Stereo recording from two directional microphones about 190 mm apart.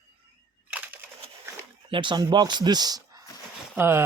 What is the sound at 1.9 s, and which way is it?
Speech, 25° right (ahead or behind).